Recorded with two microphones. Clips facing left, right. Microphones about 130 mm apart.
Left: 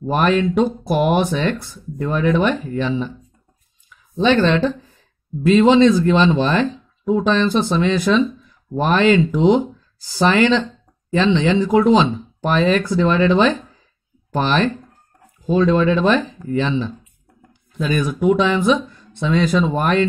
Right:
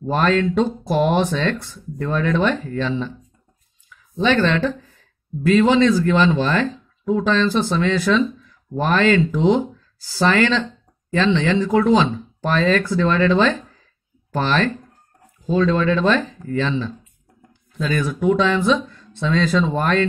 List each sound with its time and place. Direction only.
0.1 s speech: 15° left (ahead or behind)